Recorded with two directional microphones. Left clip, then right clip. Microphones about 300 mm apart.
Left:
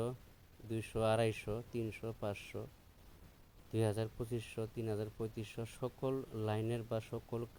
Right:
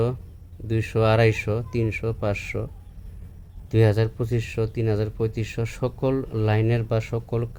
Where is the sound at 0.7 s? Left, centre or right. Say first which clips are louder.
Right 14 dB; left.